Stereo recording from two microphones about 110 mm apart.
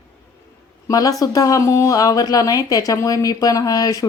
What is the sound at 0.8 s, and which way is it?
Speech, 30° left (ahead or behind).